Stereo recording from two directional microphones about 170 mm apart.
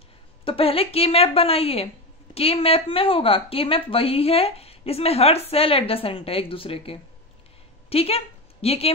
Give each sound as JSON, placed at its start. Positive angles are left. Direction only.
{"t": 0.5, "sound": "speech", "side_deg": 35}